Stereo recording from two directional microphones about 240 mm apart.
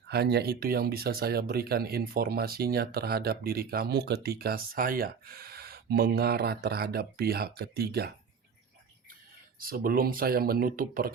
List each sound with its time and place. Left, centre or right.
0.1 s speech: right
9.6 s speech: right